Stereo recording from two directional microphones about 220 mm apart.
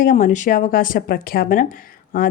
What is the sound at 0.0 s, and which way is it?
Speech, 40° left (ahead or behind).